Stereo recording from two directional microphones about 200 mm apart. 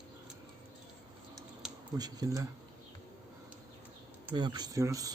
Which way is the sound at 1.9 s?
20° right (ahead or behind).